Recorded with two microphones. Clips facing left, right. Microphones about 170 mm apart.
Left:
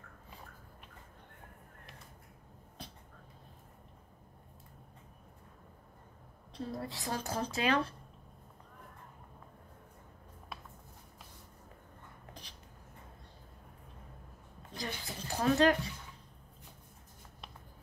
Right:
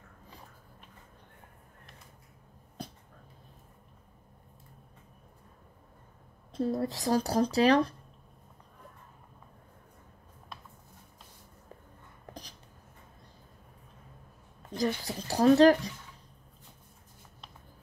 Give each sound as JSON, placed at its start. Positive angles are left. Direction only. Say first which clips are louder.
{"t": 6.5, "sound": "speech", "louder": "right 10 dB", "side_deg": -40}
{"t": 14.7, "sound": "speech", "louder": "right 11 dB", "side_deg": -40}